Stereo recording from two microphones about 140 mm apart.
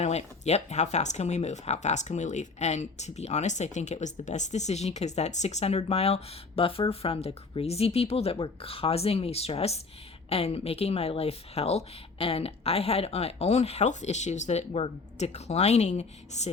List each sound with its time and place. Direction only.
0.0 s speech: 50° left (ahead or behind)